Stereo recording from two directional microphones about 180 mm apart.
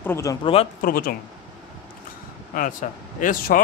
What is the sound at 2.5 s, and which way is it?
A man's voice, 50° left (ahead or behind).